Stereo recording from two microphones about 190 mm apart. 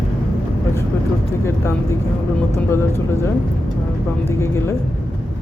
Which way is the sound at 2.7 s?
15° left (ahead or behind).